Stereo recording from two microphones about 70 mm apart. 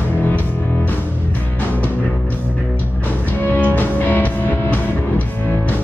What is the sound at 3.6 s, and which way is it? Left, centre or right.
Music, left.